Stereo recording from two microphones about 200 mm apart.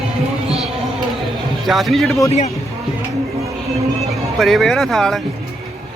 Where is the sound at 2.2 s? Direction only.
35° left (ahead or behind).